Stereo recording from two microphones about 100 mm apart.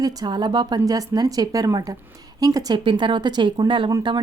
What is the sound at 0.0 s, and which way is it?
A woman's voice, 40° right (ahead or behind).